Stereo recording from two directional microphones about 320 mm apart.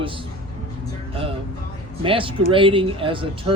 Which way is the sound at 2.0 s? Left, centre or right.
Centre.